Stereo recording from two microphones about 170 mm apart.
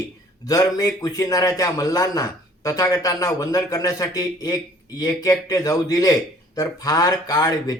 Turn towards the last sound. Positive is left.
turn(degrees=25)  # may be behind; listen again after turning